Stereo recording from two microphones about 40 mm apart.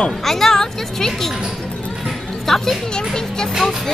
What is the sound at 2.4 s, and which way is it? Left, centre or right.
Speech, centre.